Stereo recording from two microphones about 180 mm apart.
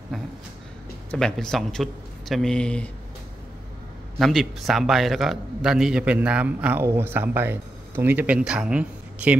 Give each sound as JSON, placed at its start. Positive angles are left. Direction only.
{"t": 0.1, "sound": "a sound", "side_deg": 0}
{"t": 1.1, "sound": "a man's voice", "side_deg": 5}
{"t": 4.2, "sound": "a man's voice", "side_deg": 0}